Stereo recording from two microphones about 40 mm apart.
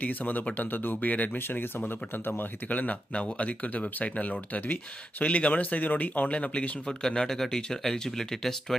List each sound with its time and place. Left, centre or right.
0.0 s speech: left
1.1 s speech: left
2.2 s speech: left
2.6 s speech: left
7.2 s speech: centre